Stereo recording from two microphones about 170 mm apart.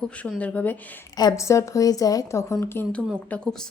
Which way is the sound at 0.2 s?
10° left (ahead or behind).